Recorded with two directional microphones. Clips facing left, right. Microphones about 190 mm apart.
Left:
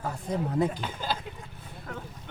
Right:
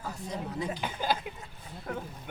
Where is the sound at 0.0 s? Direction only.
55° left (ahead or behind).